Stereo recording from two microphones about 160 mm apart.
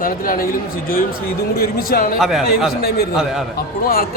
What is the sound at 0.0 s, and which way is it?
Speech, 65° left (ahead or behind).